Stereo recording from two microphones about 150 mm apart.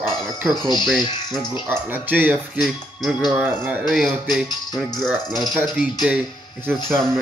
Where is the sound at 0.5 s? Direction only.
30° left (ahead or behind).